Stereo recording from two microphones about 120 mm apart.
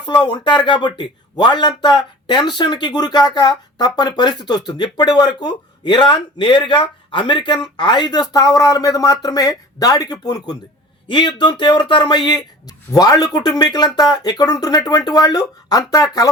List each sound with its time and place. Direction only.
0.0 s speech: 40° left (ahead or behind)